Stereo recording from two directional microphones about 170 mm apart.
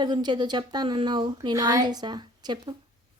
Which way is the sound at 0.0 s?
25° right (ahead or behind).